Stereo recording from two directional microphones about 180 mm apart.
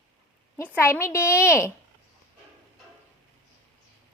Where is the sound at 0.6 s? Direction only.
10° left (ahead or behind).